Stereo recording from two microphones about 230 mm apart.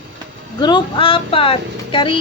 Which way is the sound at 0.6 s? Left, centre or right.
Centre.